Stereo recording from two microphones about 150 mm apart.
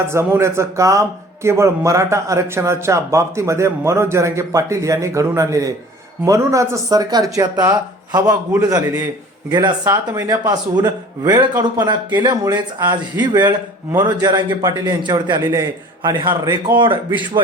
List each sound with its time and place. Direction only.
0.1 s a man's voice: 15° right (ahead or behind)